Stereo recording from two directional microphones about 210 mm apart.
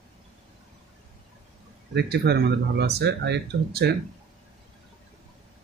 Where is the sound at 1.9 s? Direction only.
50° right (ahead or behind).